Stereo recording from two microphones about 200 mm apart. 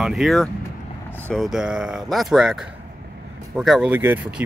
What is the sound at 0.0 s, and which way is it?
Speech, centre (ahead or behind).